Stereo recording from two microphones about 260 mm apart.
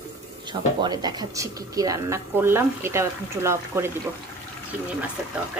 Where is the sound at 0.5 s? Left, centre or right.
Centre.